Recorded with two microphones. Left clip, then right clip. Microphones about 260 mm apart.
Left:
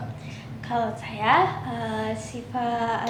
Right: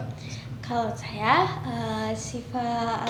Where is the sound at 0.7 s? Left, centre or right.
Right.